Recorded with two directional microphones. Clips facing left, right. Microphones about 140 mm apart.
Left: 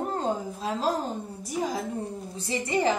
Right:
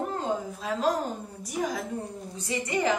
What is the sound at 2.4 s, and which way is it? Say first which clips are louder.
Speech: left 1 dB; 30° left (ahead or behind).